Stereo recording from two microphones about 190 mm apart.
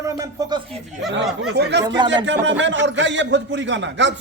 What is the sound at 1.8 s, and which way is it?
Speech, 25° right (ahead or behind).